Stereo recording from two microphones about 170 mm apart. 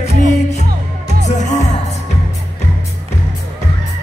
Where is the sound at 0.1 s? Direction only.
40° left (ahead or behind).